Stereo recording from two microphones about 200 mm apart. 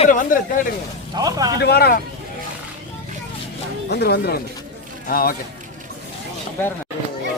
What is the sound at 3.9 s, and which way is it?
Speech, 55° left (ahead or behind).